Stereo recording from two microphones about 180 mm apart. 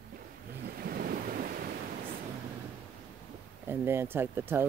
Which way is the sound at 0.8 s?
55° right (ahead or behind).